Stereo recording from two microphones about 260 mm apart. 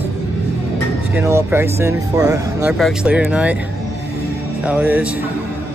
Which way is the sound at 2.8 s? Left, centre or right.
Centre.